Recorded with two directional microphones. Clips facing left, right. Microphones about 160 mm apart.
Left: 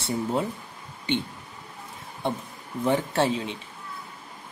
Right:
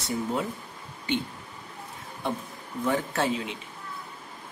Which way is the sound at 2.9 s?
30° left (ahead or behind).